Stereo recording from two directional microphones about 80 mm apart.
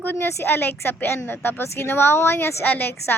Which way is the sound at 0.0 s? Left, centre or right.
Left.